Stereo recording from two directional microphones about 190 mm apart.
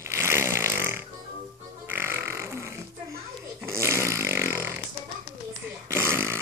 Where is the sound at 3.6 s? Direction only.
15° right (ahead or behind).